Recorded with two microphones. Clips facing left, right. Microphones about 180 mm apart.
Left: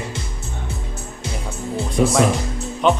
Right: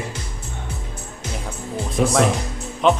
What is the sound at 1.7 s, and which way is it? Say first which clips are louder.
Music: left 1 dB; centre (ahead or behind).